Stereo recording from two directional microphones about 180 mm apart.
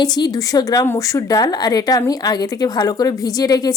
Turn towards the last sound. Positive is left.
turn(degrees=20)  # may be behind; listen again after turning